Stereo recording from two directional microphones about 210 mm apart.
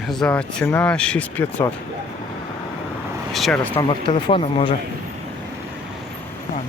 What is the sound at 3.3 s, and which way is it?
Speech, 5° left (ahead or behind).